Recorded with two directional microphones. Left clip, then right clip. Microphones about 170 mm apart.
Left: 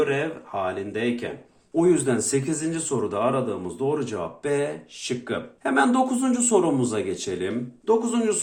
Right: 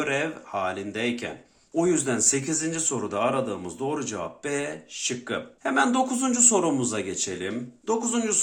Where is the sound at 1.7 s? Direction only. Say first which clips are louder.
Left 3 dB; 15° right (ahead or behind).